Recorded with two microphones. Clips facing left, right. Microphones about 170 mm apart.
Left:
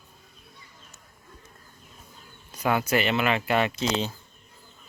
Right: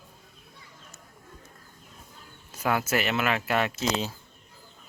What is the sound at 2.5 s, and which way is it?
Speech, 5° right (ahead or behind).